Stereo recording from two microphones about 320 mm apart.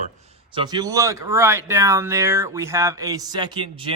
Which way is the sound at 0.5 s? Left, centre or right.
Centre.